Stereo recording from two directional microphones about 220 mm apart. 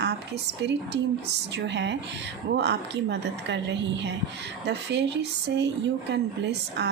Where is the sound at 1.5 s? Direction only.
50° right (ahead or behind).